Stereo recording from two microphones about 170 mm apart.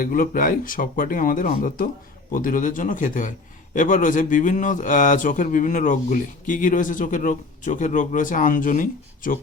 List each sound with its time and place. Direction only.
0.0 s a man's voice: 55° left (ahead or behind)